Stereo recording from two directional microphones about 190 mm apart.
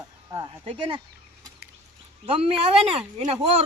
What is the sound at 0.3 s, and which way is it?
Speech, 20° right (ahead or behind).